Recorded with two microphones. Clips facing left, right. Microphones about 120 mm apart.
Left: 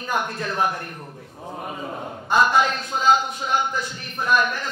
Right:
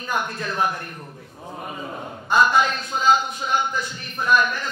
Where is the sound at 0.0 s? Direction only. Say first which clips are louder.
Left 1 dB; 50° left (ahead or behind).